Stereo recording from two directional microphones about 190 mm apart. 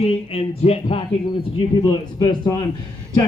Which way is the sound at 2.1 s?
20° left (ahead or behind).